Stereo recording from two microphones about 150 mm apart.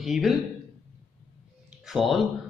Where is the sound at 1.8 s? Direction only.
Centre (ahead or behind).